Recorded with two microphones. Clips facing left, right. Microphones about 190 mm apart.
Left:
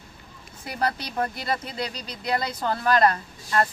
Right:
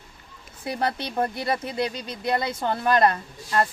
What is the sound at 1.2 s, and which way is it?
Speech, 25° right (ahead or behind).